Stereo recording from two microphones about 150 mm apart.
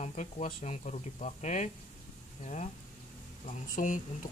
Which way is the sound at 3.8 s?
60° left (ahead or behind).